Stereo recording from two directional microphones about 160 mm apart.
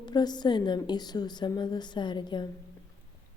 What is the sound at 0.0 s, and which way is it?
Speech, 25° left (ahead or behind).